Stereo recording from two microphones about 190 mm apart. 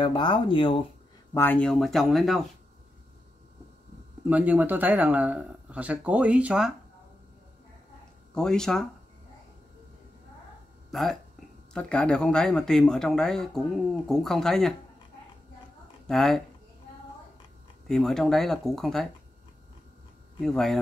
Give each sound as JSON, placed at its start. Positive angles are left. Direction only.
{"t": 0.0, "sound": "speech", "side_deg": 25}
{"t": 1.3, "sound": "speech", "side_deg": 10}
{"t": 4.2, "sound": "speech", "side_deg": -10}
{"t": 8.4, "sound": "speech", "side_deg": 5}
{"t": 10.9, "sound": "speech", "side_deg": 0}
{"t": 16.1, "sound": "speech", "side_deg": 0}
{"t": 17.8, "sound": "speech", "side_deg": 0}
{"t": 20.4, "sound": "speech", "side_deg": 0}